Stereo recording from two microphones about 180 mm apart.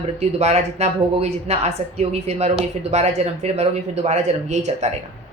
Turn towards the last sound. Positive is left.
turn(degrees=-40)  # may be behind; listen again after turning